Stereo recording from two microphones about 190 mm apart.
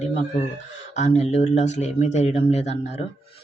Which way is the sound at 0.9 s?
35° left (ahead or behind).